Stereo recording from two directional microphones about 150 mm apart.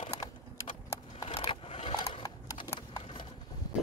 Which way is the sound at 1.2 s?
40° left (ahead or behind).